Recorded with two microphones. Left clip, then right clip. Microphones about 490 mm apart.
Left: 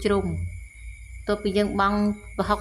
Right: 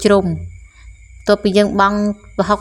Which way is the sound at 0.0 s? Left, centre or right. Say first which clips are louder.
Right 11 dB; left.